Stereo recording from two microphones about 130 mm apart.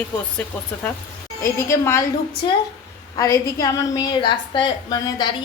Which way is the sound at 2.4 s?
35° left (ahead or behind).